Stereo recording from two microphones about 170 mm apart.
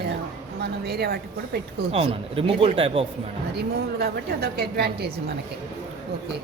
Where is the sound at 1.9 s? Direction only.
35° right (ahead or behind).